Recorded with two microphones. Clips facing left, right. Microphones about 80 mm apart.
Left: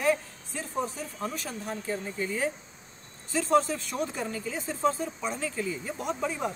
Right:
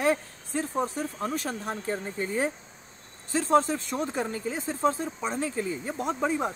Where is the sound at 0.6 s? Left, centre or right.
Right.